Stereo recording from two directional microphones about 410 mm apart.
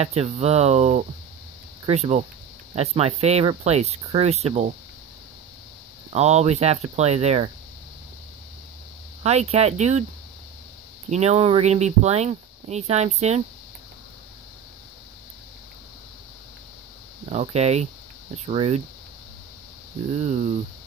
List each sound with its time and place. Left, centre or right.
0.0 s speech: centre
6.1 s speech: centre
9.2 s speech: centre
11.1 s speech: centre
17.3 s speech: centre